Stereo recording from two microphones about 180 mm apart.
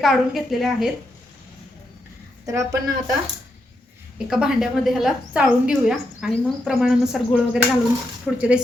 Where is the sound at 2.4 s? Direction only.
20° right (ahead or behind).